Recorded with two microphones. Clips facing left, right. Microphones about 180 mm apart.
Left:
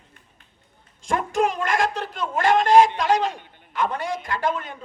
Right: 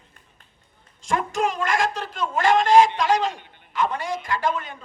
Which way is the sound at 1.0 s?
55° left (ahead or behind).